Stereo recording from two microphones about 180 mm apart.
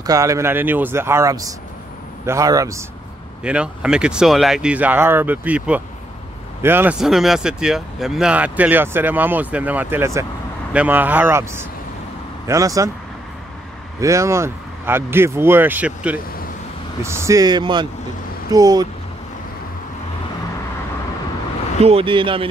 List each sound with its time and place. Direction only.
0.0 s speech: 20° right (ahead or behind)
3.4 s speech: 5° right (ahead or behind)
13.9 s speech: 15° right (ahead or behind)
21.8 s speech: 30° right (ahead or behind)